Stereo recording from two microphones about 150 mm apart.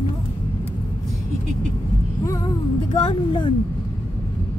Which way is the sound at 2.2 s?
25° left (ahead or behind).